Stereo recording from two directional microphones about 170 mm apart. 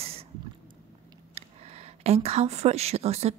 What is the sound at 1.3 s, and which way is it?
Speech, 35° right (ahead or behind).